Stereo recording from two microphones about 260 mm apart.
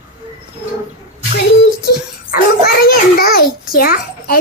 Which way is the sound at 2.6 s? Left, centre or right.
Left.